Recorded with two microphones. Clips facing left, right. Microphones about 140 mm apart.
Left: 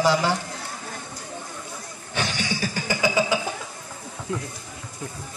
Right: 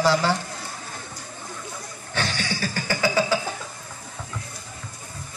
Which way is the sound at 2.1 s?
15° left (ahead or behind).